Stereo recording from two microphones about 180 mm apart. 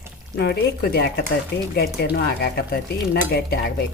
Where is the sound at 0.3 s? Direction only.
65° left (ahead or behind).